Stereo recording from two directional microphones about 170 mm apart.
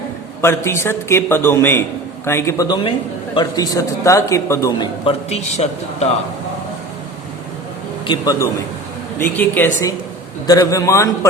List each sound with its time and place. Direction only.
0.4 s a man's voice: 15° left (ahead or behind)
2.6 s a man's voice: 25° left (ahead or behind)
5.0 s a man's voice: 40° left (ahead or behind)
8.0 s a man's voice: 25° left (ahead or behind)
9.1 s a man's voice: 10° left (ahead or behind)